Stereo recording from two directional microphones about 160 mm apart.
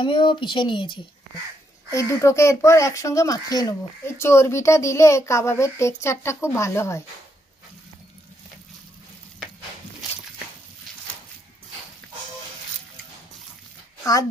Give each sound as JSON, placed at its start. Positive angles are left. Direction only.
{"t": 0.0, "sound": "speech", "side_deg": 30}
{"t": 1.9, "sound": "speech", "side_deg": 20}